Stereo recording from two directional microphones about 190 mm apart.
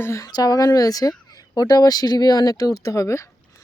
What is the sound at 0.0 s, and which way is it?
Speech, 15° left (ahead or behind).